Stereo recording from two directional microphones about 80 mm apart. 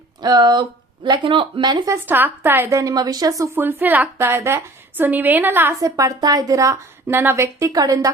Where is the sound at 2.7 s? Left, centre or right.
Right.